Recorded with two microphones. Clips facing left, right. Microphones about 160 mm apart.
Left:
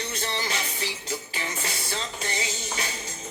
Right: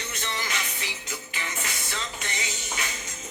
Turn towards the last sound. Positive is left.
turn(degrees=35)  # may be behind; listen again after turning